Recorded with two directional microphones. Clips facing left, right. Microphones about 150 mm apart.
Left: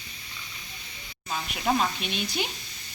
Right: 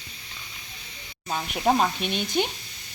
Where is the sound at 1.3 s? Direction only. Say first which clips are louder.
Right 4 dB; 40° right (ahead or behind).